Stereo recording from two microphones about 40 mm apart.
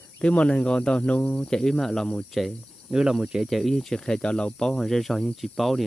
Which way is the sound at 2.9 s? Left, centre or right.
Centre.